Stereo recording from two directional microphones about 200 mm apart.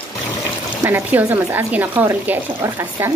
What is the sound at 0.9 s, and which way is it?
Speech, 10° right (ahead or behind).